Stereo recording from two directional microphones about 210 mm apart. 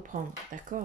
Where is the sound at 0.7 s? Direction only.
40° right (ahead or behind).